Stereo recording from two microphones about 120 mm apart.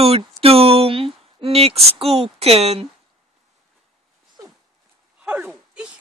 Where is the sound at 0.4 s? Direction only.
55° right (ahead or behind).